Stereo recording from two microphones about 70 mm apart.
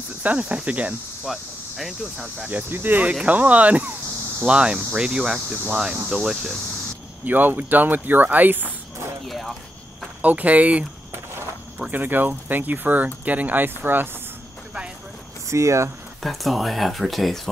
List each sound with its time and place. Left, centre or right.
0.2 s cricket: right
0.7 s speech: right
1.2 s speech: centre
2.5 s speech: right; by 6.5 s centre
7.2 s speech: right
9.3 s speech: centre
10.2 s speech: right
11.9 s speech: right
15.5 s speech: right
16.2 s speech: centre